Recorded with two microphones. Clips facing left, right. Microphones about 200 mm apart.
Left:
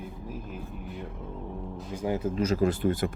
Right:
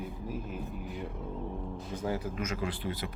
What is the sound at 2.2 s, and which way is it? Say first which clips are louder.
Speech: left 9 dB; 25° left (ahead or behind).